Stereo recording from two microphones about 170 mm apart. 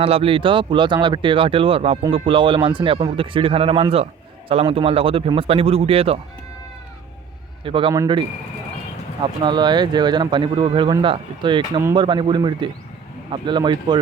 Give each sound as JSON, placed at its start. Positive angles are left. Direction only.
{"t": 0.0, "sound": "speech", "side_deg": -35}
{"t": 7.6, "sound": "speech", "side_deg": -30}
{"t": 9.2, "sound": "speech", "side_deg": -25}